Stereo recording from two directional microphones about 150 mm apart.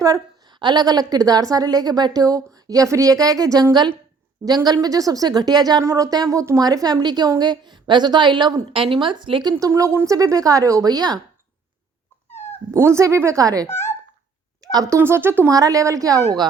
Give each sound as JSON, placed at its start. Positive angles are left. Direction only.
{"t": 0.6, "sound": "a woman's voice", "side_deg": -30}
{"t": 12.7, "sound": "a woman's voice", "side_deg": -20}